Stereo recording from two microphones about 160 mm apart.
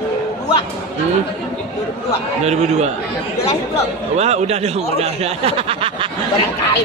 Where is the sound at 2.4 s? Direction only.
45° right (ahead or behind).